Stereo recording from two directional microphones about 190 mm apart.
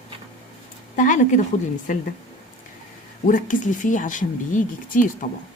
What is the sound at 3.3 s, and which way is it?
Speech, 45° left (ahead or behind).